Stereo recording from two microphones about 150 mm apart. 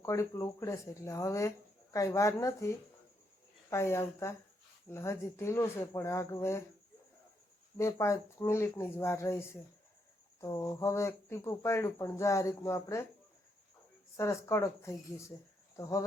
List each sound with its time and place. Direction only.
0.0 s speech: 20° left (ahead or behind)
7.8 s speech: 20° left (ahead or behind)
14.2 s speech: 20° left (ahead or behind)